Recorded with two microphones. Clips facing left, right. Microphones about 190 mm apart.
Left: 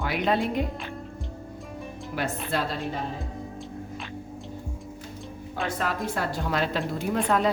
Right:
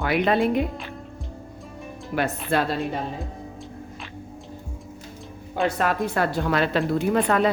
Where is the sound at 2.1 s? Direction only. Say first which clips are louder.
Right 5 dB; 60° right (ahead or behind).